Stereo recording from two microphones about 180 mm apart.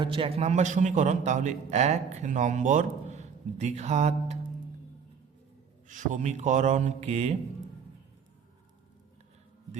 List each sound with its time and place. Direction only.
0.0 s a man's voice: 30° right (ahead or behind)
5.9 s a man's voice: 45° right (ahead or behind)